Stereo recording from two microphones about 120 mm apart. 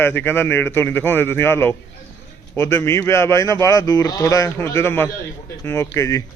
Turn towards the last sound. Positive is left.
turn(degrees=30)  # may be behind; listen again after turning